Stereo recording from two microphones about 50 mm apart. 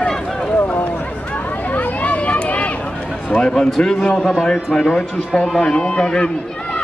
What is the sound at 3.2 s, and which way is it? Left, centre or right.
Speech, left.